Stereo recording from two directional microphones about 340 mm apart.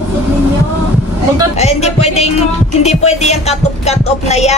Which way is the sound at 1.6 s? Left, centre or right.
Centre.